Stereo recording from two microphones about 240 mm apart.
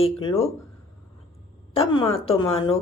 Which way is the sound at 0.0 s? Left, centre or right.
Left.